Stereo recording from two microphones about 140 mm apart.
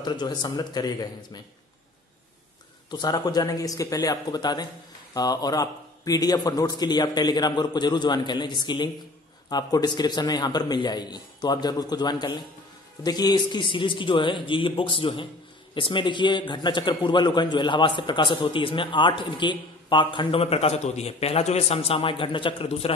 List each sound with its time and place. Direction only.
0.0 s a man's voice: 30° left (ahead or behind)
2.9 s a man's voice: 30° left (ahead or behind); by 22.9 s 45° left (ahead or behind)